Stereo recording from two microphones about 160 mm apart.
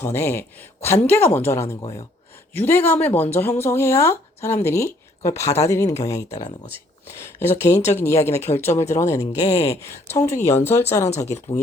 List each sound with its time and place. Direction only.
0.0 s speech: 15° left (ahead or behind)
7.5 s speech: 45° left (ahead or behind)
7.9 s speech: 15° left (ahead or behind)